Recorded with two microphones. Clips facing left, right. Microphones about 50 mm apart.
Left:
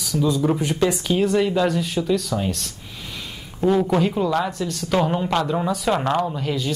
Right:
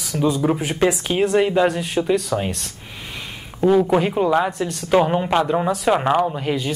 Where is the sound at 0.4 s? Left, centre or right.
Centre.